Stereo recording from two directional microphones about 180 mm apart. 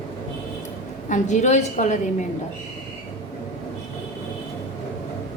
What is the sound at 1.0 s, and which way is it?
A woman's voice, 45° left (ahead or behind).